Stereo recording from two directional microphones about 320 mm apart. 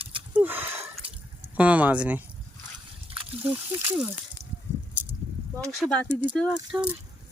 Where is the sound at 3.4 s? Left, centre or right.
Centre.